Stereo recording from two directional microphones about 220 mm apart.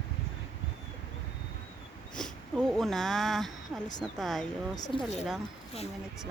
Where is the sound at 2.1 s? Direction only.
Centre (ahead or behind).